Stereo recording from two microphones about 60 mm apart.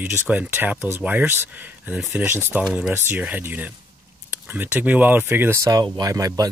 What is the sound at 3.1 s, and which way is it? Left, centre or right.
Speech, right.